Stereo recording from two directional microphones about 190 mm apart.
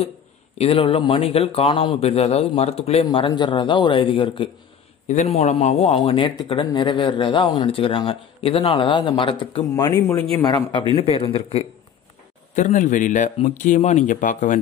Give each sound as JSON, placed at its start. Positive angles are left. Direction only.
{"t": 0.6, "sound": "a man's voice", "side_deg": 30}
{"t": 5.0, "sound": "a man's voice", "side_deg": 35}
{"t": 12.5, "sound": "a man's voice", "side_deg": 40}